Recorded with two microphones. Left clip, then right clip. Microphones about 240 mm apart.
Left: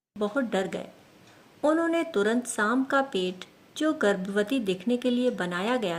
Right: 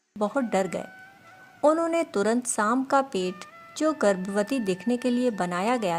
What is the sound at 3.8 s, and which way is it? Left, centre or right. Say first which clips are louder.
Speech: right 2 dB; right.